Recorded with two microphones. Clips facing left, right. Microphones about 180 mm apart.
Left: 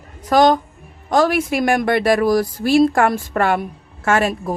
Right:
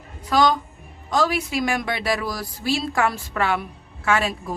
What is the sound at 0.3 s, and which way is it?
Speech, 50° left (ahead or behind).